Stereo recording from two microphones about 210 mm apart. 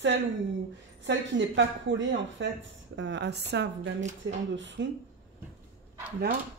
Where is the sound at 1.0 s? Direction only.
60° right (ahead or behind).